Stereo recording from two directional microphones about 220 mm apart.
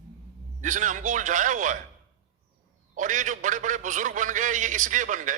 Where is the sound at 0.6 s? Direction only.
35° right (ahead or behind).